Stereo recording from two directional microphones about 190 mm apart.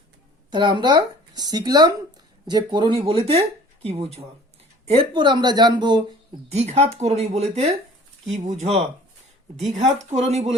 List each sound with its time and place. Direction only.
0.5 s speech: 25° right (ahead or behind)
6.5 s speech: 35° right (ahead or behind)